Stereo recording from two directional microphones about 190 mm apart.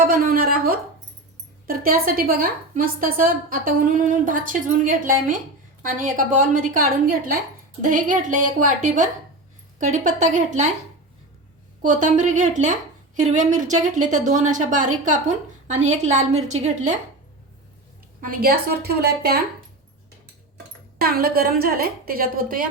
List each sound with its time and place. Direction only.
0.0 s a woman's voice: 50° right (ahead or behind)
11.8 s a woman's voice: 40° right (ahead or behind)
18.2 s a woman's voice: 50° right (ahead or behind)
21.0 s a woman's voice: 50° right (ahead or behind)